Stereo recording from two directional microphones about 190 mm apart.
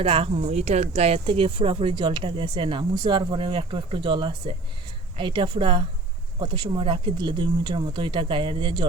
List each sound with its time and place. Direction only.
0.0 s speech: 30° right (ahead or behind)